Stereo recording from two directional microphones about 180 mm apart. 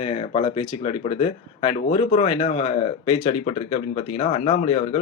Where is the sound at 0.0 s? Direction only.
35° left (ahead or behind).